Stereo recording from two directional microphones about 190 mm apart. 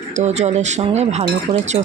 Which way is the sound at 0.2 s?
35° right (ahead or behind).